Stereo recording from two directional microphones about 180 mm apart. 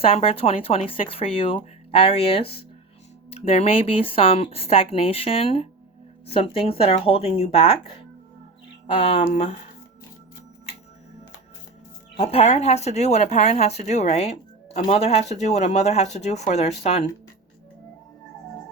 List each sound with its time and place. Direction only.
0.0 s speech: 30° left (ahead or behind)
12.1 s speech: 35° left (ahead or behind)